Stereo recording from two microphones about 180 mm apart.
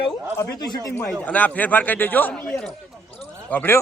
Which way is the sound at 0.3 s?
20° left (ahead or behind).